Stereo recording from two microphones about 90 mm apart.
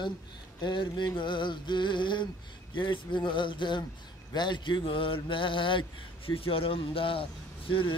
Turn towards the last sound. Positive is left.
turn(degrees=75)  # may be behind; listen again after turning